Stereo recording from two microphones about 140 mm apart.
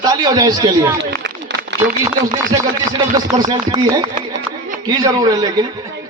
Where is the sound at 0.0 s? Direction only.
30° right (ahead or behind).